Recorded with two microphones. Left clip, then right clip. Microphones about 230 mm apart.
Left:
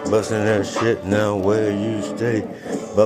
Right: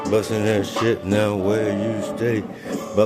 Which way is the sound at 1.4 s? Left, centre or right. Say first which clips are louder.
Left 2 dB; centre.